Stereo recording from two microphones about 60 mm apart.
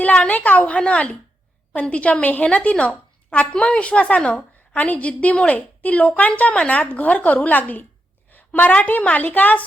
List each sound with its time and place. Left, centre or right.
0.0 s a woman's voice: left